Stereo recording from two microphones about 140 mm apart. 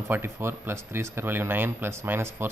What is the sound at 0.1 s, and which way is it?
Speech, 15° right (ahead or behind).